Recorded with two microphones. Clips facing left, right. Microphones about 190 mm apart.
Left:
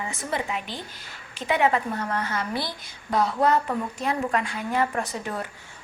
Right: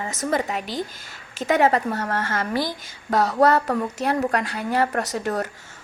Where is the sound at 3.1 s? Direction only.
40° right (ahead or behind).